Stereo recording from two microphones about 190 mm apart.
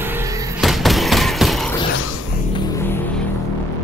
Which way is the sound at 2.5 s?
20° left (ahead or behind).